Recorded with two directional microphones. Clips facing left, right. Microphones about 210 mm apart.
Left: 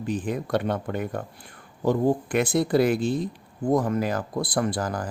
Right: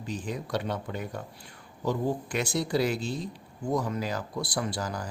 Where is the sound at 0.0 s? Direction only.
55° left (ahead or behind).